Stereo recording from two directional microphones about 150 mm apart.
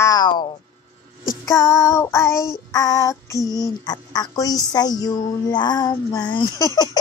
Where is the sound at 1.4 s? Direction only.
20° left (ahead or behind).